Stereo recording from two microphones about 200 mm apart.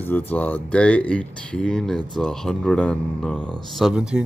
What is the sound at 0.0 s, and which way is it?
Speech, 10° left (ahead or behind).